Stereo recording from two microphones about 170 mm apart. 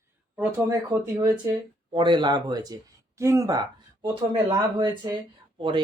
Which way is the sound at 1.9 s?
30° right (ahead or behind).